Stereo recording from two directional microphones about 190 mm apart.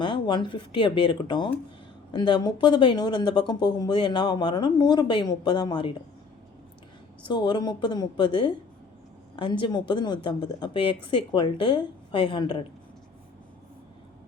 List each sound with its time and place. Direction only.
0.0 s speech: 25° left (ahead or behind)
7.3 s speech: 25° left (ahead or behind)